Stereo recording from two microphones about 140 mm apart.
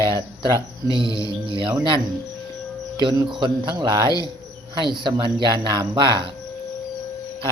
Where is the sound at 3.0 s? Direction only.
35° right (ahead or behind).